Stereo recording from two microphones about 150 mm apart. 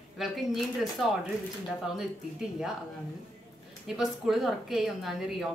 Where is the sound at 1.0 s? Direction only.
Centre (ahead or behind).